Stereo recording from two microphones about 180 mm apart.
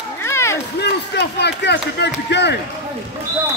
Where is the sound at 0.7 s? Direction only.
70° left (ahead or behind).